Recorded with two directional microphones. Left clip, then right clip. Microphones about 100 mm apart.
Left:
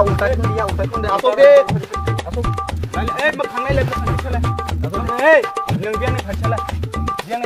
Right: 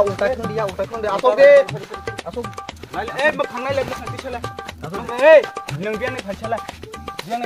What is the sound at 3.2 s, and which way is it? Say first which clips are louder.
Speech: right 1 dB; 20° left (ahead or behind).